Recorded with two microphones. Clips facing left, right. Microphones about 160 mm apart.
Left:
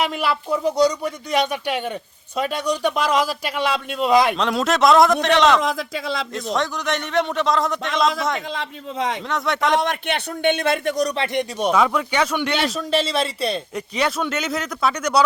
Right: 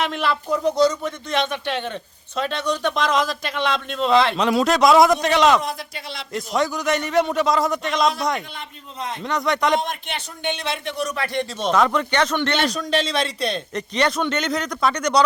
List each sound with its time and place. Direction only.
0.0 s speech: 10° left (ahead or behind)
4.4 s speech: centre (ahead or behind)
5.5 s speech: 90° left
6.3 s speech: centre (ahead or behind)
8.5 s speech: 90° left
9.2 s speech: centre (ahead or behind)
9.7 s speech: 70° left (ahead or behind); by 11.2 s 40° left (ahead or behind)
11.2 s speech: 20° left (ahead or behind)